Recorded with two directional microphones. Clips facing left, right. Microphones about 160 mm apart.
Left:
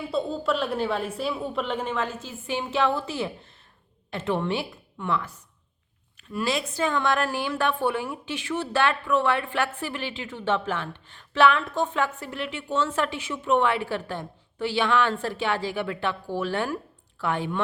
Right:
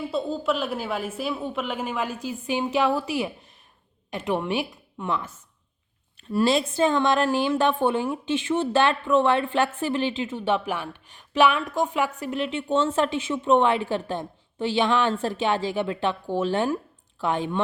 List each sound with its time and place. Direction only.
0.1 s a woman's voice: 5° right (ahead or behind); by 5.3 s 20° right (ahead or behind)
6.3 s a woman's voice: 30° right (ahead or behind)